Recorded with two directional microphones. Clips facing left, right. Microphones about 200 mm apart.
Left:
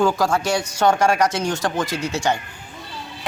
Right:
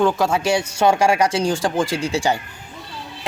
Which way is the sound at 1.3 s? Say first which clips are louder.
Right 3 dB; 30° right (ahead or behind).